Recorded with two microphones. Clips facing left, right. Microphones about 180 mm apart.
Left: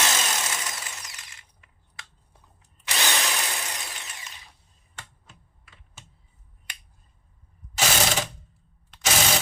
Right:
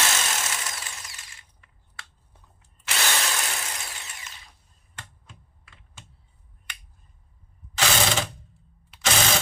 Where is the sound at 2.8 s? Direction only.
15° left (ahead or behind).